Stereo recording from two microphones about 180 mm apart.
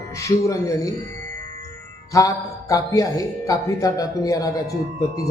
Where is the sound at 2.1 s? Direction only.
20° left (ahead or behind).